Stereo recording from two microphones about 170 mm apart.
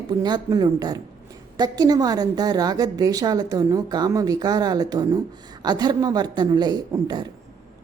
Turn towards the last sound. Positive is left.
turn(degrees=-25)  # may be behind; listen again after turning